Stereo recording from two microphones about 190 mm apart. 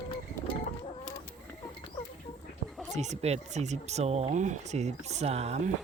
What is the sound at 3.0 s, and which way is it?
Speech, 35° right (ahead or behind).